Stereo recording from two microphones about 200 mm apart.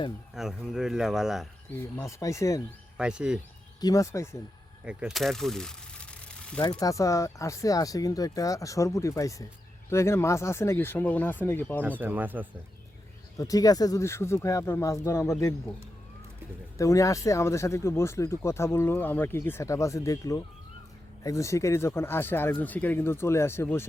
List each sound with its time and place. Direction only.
0.3 s speech: centre (ahead or behind)
1.8 s speech: 15° left (ahead or behind)
3.0 s speech: 5° right (ahead or behind)
3.8 s speech: 20° left (ahead or behind)
4.9 s speech: 5° right (ahead or behind)
6.6 s speech: 20° left (ahead or behind)
11.8 s speech: 10° right (ahead or behind)
13.3 s speech: 15° left (ahead or behind)
16.7 s speech: 15° left (ahead or behind)